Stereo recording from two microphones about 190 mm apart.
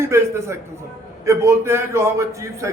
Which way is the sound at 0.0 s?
15° right (ahead or behind).